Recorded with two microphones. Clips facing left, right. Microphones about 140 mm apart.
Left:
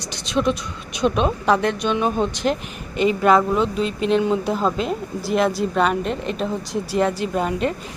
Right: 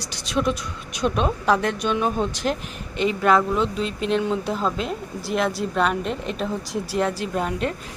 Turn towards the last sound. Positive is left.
turn(degrees=0)  # may be behind; listen again after turning